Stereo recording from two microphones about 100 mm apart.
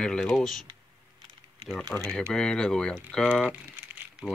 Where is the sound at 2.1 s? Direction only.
10° left (ahead or behind).